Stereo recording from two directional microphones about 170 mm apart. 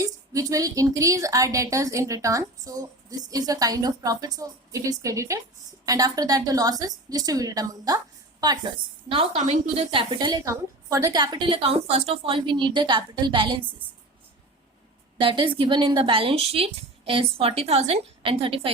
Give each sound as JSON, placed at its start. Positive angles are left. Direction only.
{"t": 0.0, "sound": "a woman's voice", "side_deg": -20}
{"t": 9.0, "sound": "a woman's voice", "side_deg": -35}
{"t": 15.2, "sound": "a woman's voice", "side_deg": -30}